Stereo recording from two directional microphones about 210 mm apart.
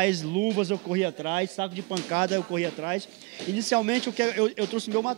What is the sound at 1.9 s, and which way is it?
A man's voice, 20° right (ahead or behind).